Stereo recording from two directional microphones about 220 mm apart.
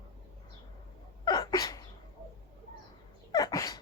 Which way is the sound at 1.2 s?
20° left (ahead or behind).